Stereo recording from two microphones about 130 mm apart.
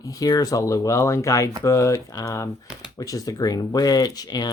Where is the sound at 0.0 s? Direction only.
25° left (ahead or behind).